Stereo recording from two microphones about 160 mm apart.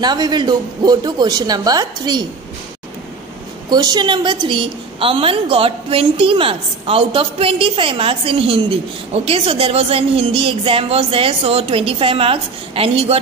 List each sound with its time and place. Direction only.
0.0 s a woman's voice: 25° right (ahead or behind)
3.7 s a woman's voice: 25° right (ahead or behind)